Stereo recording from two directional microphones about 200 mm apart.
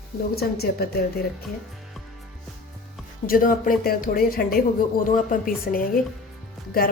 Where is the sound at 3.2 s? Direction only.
45° left (ahead or behind).